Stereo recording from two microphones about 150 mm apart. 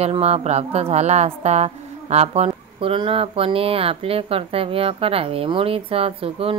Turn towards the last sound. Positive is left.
turn(degrees=-40)  # may be behind; listen again after turning